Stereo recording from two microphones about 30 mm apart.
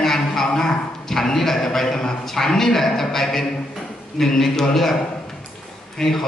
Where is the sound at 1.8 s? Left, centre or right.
Left.